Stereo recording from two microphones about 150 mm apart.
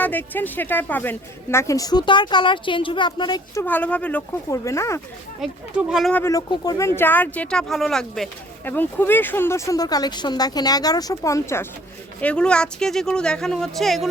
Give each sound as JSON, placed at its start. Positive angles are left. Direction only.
{"t": 0.0, "sound": "a woman's voice", "side_deg": 10}
{"t": 3.6, "sound": "speech", "side_deg": 10}
{"t": 4.5, "sound": "a woman's voice", "side_deg": 20}
{"t": 5.4, "sound": "speech", "side_deg": 0}
{"t": 6.1, "sound": "speech", "side_deg": 20}
{"t": 8.6, "sound": "a woman's voice", "side_deg": 15}